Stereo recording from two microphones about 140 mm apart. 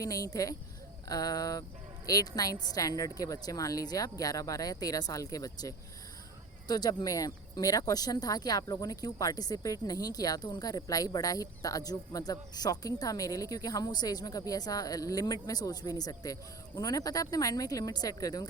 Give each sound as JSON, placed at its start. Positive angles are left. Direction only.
{"t": 0.0, "sound": "speech", "side_deg": 25}